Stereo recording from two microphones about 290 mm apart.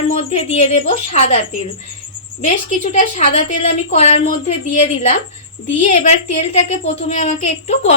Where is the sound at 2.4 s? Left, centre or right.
Left.